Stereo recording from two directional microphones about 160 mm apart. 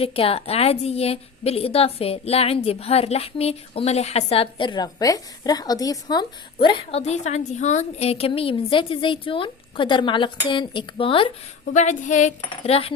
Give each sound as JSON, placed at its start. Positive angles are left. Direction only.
{"t": 0.0, "sound": "a woman's voice", "side_deg": 35}
{"t": 11.7, "sound": "speech", "side_deg": 50}